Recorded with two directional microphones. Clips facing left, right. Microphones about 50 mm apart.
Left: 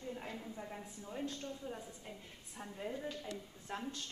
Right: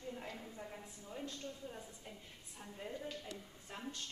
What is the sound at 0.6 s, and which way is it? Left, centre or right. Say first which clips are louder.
A woman's voice: left 3 dB; centre.